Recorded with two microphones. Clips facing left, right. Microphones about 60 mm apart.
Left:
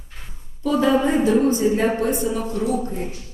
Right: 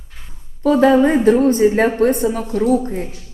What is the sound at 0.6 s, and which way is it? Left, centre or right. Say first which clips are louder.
A woman's voice: right 6 dB; right.